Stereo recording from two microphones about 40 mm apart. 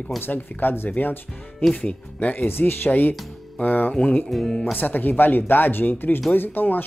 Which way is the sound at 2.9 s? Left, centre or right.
Left.